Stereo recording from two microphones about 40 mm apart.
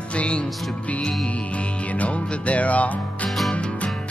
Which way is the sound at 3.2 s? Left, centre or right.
Centre.